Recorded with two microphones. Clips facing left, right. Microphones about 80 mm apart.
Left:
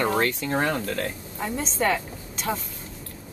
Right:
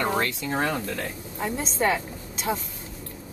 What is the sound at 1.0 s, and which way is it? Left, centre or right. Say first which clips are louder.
A woman's voice: even; right.